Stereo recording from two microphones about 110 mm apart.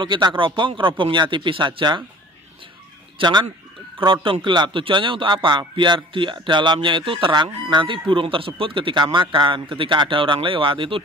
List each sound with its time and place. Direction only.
0.0 s a man's voice: 45° right (ahead or behind)
3.2 s a man's voice: 40° right (ahead or behind)